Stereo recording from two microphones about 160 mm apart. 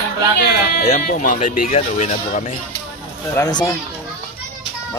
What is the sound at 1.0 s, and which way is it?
Speech, 55° left (ahead or behind).